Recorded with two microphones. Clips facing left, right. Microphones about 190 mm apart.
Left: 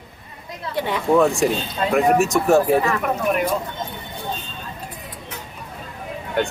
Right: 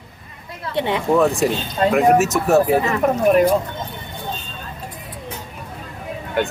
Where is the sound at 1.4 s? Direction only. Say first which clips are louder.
Right 2 dB; centre (ahead or behind).